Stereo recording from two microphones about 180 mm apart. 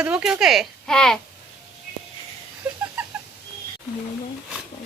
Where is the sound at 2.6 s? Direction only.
5° right (ahead or behind).